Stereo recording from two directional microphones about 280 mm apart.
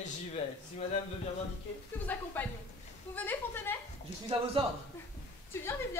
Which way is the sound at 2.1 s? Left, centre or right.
Centre.